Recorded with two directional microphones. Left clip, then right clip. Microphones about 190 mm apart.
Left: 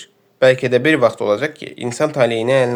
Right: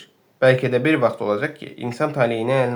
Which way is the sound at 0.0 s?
35° left (ahead or behind).